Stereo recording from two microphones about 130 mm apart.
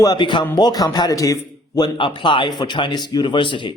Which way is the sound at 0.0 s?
35° left (ahead or behind).